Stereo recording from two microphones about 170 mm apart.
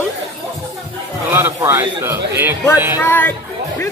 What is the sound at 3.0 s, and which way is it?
Speech, 10° left (ahead or behind).